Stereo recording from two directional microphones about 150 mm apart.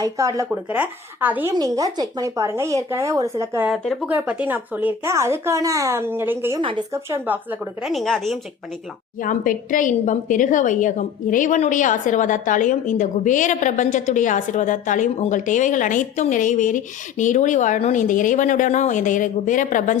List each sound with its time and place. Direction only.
0.0 s speech: 20° right (ahead or behind)
0.5 s speech: 10° right (ahead or behind)
1.5 s speech: 25° right (ahead or behind)
3.7 s a woman's voice: centre (ahead or behind)
6.6 s a woman's voice: 35° right (ahead or behind)
6.9 s speech: 15° right (ahead or behind)
7.9 s a woman's voice: centre (ahead or behind)
9.1 s a woman's voice: 65° left (ahead or behind)